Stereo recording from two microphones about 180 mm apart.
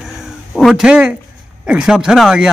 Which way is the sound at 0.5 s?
Centre (ahead or behind).